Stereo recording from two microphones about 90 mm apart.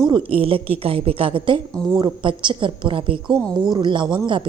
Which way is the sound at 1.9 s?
60° right (ahead or behind).